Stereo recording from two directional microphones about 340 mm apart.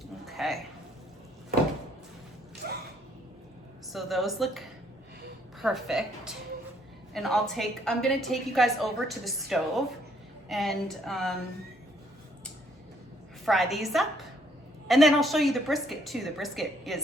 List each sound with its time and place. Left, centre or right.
0.3 s a sound: centre
2.6 s gasp: right
3.9 s a woman's voice: centre
5.6 s a woman's voice: centre
13.4 s a woman's voice: centre